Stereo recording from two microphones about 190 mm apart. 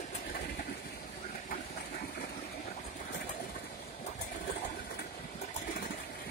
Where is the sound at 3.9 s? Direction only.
40° left (ahead or behind).